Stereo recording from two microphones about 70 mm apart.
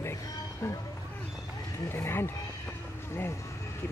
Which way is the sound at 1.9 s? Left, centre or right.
Left.